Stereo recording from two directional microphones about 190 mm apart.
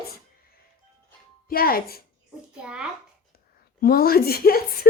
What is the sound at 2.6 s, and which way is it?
Speech, 5° right (ahead or behind).